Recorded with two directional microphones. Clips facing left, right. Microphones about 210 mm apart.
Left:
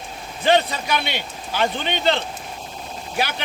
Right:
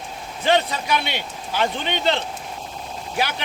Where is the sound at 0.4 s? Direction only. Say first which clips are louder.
Left 1 dB; 20° right (ahead or behind).